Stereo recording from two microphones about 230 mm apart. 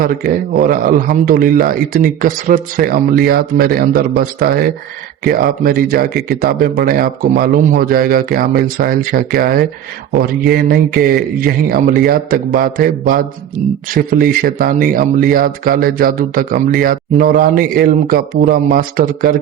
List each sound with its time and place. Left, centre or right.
0.0 s a man's voice: right